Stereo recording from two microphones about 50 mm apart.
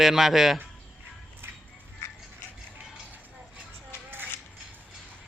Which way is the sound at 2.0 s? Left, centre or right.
Left.